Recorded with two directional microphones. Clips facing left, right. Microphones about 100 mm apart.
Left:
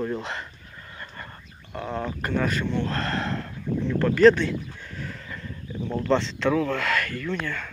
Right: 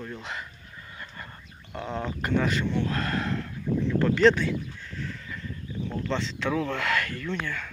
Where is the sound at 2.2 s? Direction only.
20° right (ahead or behind).